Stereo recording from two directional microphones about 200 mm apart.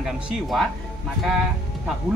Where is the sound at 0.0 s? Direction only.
Centre (ahead or behind).